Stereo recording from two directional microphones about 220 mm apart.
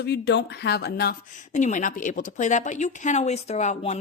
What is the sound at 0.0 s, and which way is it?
Speech, 50° left (ahead or behind).